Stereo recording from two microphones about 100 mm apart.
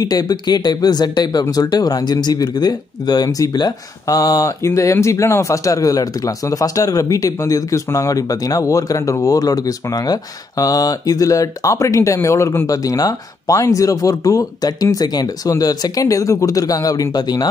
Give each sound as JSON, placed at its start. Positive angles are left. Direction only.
{"t": 0.0, "sound": "speech", "side_deg": 40}